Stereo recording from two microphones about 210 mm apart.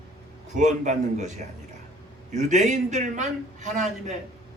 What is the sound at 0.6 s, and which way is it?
A man's voice, 35° right (ahead or behind).